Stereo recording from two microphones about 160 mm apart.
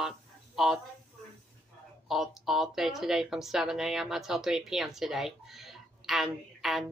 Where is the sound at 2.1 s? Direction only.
5° right (ahead or behind).